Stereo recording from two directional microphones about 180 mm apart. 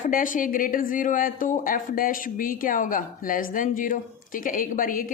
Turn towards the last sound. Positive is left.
turn(degrees=50)  # may be behind; listen again after turning